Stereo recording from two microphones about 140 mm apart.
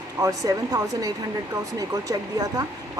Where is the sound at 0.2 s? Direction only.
25° right (ahead or behind).